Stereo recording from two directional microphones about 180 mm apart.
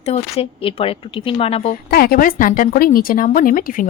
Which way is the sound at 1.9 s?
55° left (ahead or behind).